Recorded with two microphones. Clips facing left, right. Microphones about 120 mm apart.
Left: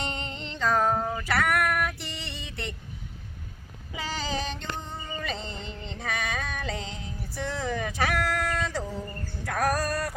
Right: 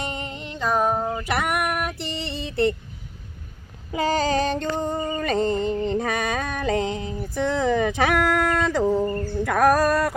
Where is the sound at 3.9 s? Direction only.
50° right (ahead or behind).